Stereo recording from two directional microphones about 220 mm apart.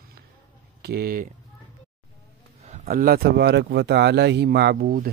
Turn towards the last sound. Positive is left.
turn(degrees=-40)  # may be behind; listen again after turning